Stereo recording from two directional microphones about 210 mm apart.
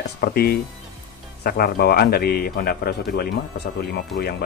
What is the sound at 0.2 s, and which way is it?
Speech, 45° left (ahead or behind).